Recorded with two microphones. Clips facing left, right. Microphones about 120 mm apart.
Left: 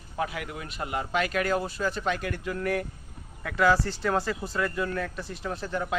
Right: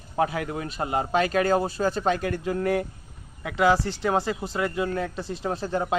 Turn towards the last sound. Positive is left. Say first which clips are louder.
# right 4 dB
turn(degrees=-30)  # may be behind; listen again after turning